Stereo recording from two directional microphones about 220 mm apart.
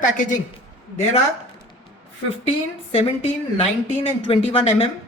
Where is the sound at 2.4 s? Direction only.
25° left (ahead or behind).